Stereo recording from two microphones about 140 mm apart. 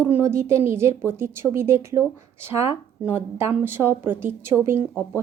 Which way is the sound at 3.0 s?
15° right (ahead or behind).